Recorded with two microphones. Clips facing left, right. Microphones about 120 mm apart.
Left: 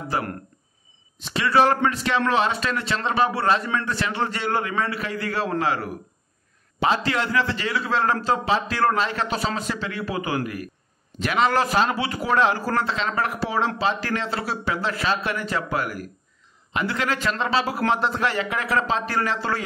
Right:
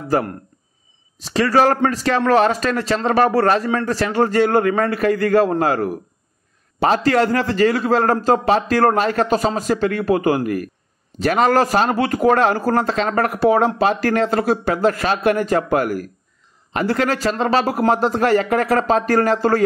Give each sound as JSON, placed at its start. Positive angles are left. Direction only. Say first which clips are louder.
{"t": 0.1, "sound": "a man's voice", "louder": "right 9 dB", "side_deg": -45}